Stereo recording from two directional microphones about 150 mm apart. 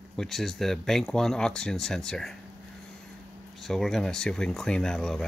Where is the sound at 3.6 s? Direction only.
Centre (ahead or behind).